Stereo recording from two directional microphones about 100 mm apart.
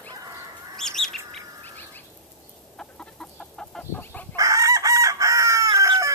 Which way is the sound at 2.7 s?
10° left (ahead or behind).